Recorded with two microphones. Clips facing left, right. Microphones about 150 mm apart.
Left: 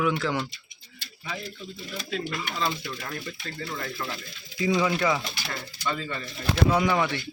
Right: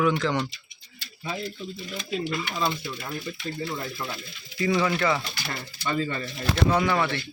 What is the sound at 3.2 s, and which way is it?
Speech, 15° right (ahead or behind).